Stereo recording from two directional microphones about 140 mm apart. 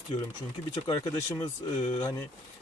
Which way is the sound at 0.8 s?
25° left (ahead or behind).